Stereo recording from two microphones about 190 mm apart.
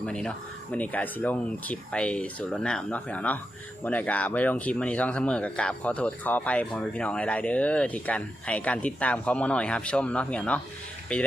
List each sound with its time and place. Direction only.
0.0 s speech: 5° left (ahead or behind)